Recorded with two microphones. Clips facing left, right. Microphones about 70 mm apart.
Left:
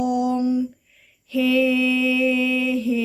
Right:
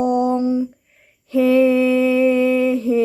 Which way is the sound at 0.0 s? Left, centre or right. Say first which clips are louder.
Right 3 dB; right.